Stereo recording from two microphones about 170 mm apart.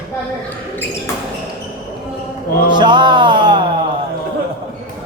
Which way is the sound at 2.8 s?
25° right (ahead or behind).